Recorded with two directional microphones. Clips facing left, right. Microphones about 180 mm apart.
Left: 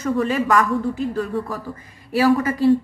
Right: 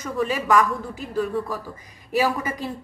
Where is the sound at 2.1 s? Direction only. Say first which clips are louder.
Left 6 dB; 15° right (ahead or behind).